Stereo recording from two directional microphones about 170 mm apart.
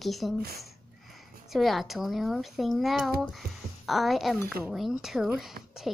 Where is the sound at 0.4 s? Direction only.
65° right (ahead or behind).